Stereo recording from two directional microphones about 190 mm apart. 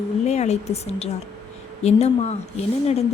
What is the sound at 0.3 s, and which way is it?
A woman's voice, 35° left (ahead or behind).